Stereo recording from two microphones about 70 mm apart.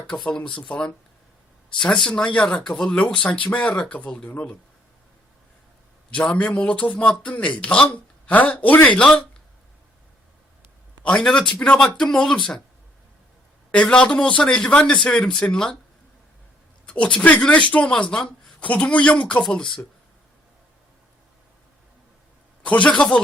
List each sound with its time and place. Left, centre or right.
0.3 s speech: centre
6.1 s a man's voice: centre
11.0 s a man's voice: centre
13.7 s speech: centre
16.8 s speech: centre
22.6 s speech: centre